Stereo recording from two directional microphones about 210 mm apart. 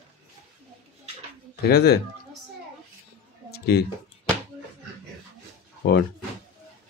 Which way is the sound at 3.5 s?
50° left (ahead or behind).